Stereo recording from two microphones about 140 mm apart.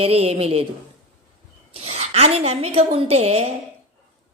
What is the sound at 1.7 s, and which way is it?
A woman's voice, 50° right (ahead or behind).